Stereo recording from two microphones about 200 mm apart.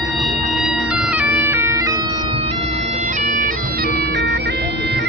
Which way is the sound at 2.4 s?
35° right (ahead or behind).